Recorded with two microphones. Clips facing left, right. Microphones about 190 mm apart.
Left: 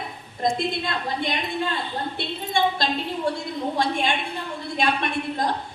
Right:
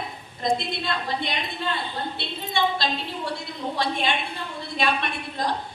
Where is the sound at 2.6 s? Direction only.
50° left (ahead or behind).